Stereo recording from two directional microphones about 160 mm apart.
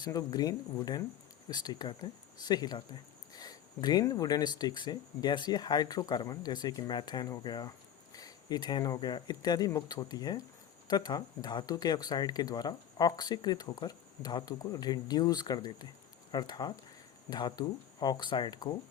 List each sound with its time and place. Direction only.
0.0 s speech: 25° left (ahead or behind)